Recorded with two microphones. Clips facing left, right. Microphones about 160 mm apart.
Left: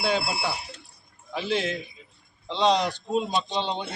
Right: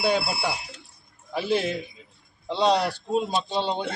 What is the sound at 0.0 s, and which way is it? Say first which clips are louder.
Speech: right 2 dB; 10° right (ahead or behind).